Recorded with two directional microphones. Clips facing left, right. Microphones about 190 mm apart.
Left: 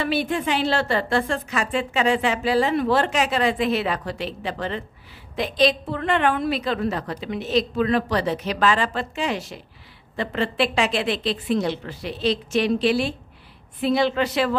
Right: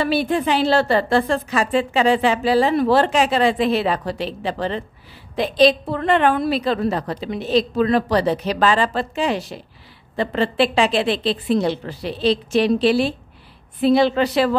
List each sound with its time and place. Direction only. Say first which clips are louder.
0.0 s a woman's voice: right 4 dB; 35° right (ahead or behind)